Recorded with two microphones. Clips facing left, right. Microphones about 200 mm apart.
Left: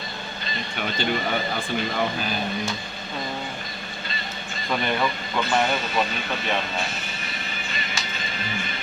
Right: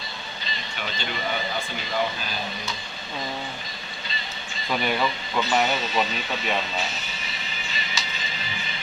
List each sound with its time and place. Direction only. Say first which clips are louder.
0.8 s speech: left 6 dB; 50° left (ahead or behind)
4.7 s speech: even; 5° right (ahead or behind)
7.7 s music: even; 55° left (ahead or behind)